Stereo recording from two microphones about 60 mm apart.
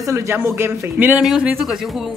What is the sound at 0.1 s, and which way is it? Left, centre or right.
Speech, right.